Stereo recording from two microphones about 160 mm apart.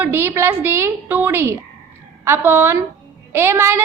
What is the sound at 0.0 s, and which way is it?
A woman's voice, 15° right (ahead or behind).